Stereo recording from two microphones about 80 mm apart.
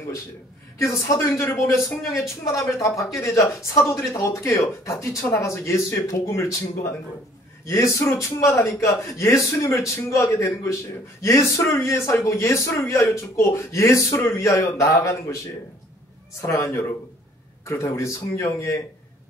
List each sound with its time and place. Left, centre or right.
0.7 s a man's voice: left
16.3 s a man's voice: left
17.9 s a man's voice: left